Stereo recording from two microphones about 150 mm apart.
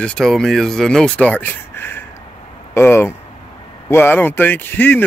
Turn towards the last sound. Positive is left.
turn(degrees=10)  # may be behind; listen again after turning